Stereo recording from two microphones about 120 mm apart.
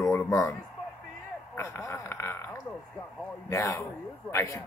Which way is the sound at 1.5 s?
20° left (ahead or behind).